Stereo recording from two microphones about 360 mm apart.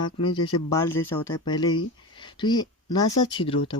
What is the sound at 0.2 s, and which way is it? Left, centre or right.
Speech, centre.